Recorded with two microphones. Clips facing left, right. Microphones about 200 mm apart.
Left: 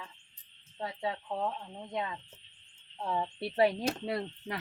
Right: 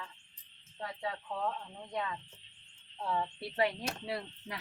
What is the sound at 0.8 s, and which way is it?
Speech, 25° left (ahead or behind).